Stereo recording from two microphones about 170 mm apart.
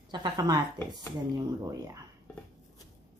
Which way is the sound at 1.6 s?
20° right (ahead or behind).